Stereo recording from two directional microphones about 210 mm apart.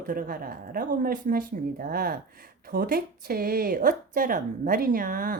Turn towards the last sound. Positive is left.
turn(degrees=-40)  # may be behind; listen again after turning